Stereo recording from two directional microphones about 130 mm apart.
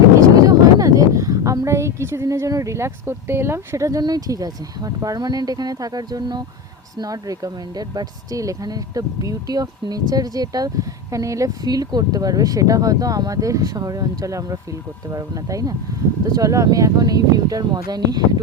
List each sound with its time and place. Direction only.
0.2 s speech: 25° right (ahead or behind)